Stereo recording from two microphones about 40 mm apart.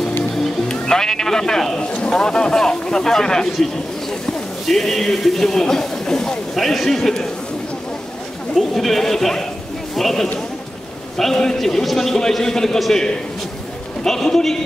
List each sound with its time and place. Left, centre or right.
0.7 s speech: centre
4.6 s speech: centre
6.5 s speech: centre
8.5 s speech: centre
14.0 s speech: centre